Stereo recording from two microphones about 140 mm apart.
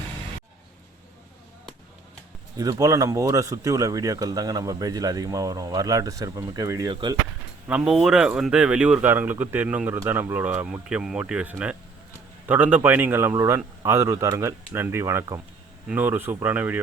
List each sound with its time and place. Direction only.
2.6 s speech: 25° right (ahead or behind)
7.7 s speech: 10° right (ahead or behind)